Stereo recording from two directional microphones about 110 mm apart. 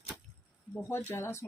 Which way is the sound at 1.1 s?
25° left (ahead or behind).